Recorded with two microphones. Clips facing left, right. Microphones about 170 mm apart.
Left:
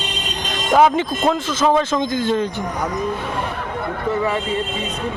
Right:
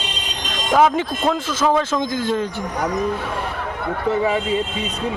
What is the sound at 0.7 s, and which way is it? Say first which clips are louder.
A man's voice: left 1 dB; centre (ahead or behind).